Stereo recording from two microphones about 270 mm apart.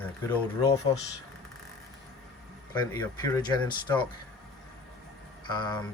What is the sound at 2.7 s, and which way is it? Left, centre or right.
Speech, centre.